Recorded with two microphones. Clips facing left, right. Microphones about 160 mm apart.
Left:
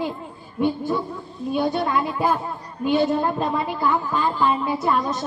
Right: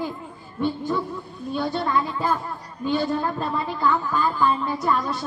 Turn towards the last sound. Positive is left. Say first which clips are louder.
# left 2 dB
turn(degrees=20)  # may be behind; listen again after turning